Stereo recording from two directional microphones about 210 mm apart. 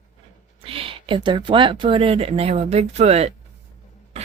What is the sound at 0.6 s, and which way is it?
Speech, 25° right (ahead or behind).